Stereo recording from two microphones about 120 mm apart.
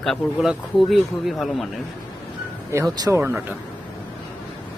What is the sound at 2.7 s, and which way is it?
Speech, 25° right (ahead or behind).